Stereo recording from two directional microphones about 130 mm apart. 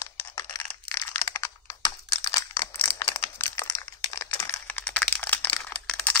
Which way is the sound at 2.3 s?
20° left (ahead or behind).